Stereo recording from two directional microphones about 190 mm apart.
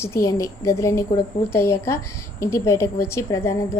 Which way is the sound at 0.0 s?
15° left (ahead or behind).